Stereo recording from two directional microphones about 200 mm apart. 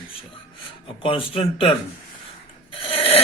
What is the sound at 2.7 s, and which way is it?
Filing, 25° left (ahead or behind).